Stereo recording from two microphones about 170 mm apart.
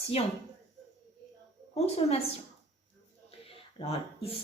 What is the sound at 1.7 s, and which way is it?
Speech, 35° left (ahead or behind).